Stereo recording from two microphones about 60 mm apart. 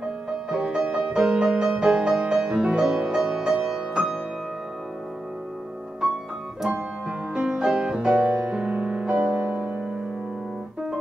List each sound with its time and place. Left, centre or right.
0.5 s music: centre
6.7 s music: centre